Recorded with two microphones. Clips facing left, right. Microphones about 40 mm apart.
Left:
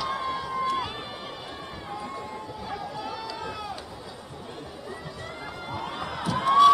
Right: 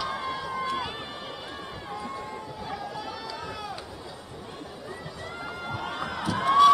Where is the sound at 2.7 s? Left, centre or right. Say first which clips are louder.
Left 2 dB; centre.